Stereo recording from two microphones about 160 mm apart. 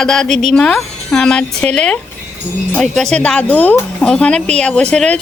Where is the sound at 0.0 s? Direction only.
5° left (ahead or behind).